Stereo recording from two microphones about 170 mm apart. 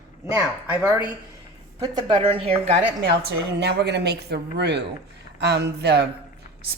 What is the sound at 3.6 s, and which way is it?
Speech, 80° right.